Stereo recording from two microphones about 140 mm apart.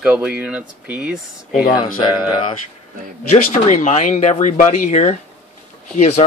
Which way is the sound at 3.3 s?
55° left (ahead or behind).